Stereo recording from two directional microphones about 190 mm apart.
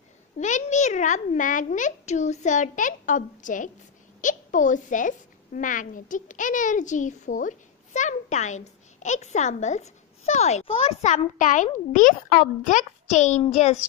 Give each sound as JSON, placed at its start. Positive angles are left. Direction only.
{"t": 0.4, "sound": "a woman's voice", "side_deg": 40}